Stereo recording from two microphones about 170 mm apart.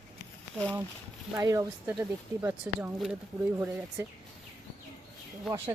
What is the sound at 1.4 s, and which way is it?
Speech, 20° right (ahead or behind).